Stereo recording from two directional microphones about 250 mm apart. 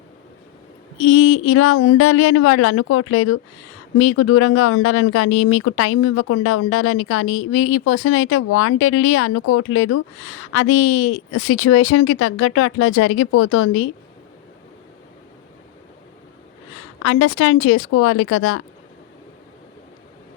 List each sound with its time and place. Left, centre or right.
0.9 s speech: left
17.0 s speech: left